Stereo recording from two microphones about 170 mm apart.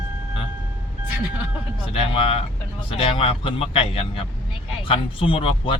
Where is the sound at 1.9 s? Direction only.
35° left (ahead or behind).